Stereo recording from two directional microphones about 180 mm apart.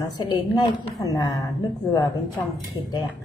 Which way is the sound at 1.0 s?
20° left (ahead or behind).